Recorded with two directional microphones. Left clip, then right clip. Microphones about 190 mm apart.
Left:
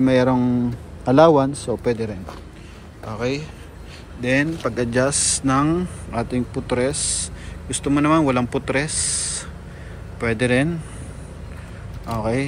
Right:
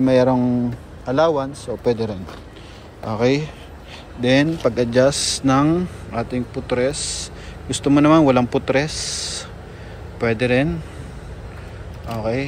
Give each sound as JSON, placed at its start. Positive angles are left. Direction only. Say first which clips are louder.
{"t": 0.0, "sound": "speech", "louder": "right 2 dB", "side_deg": -5}
{"t": 1.0, "sound": "a man's voice", "louder": "left 4 dB", "side_deg": 10}
{"t": 1.9, "sound": "speech", "louder": "right 4 dB", "side_deg": -10}
{"t": 3.1, "sound": "a man's voice", "louder": "right 6 dB", "side_deg": -25}
{"t": 12.1, "sound": "speech", "louder": "even", "side_deg": -5}